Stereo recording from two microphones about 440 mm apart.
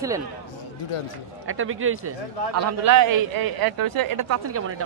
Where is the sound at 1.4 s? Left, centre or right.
Right.